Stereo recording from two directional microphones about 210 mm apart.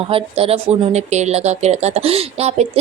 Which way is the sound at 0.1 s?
25° right (ahead or behind).